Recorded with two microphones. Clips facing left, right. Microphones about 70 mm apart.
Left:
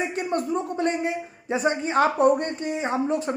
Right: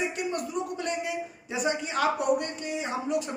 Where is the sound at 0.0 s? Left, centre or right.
Left.